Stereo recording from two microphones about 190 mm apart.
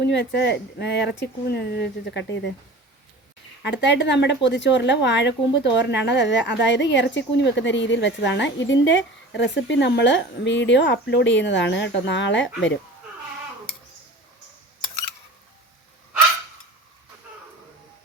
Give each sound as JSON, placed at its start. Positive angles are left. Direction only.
{"t": 0.0, "sound": "speech", "side_deg": 65}
{"t": 3.6, "sound": "speech", "side_deg": 70}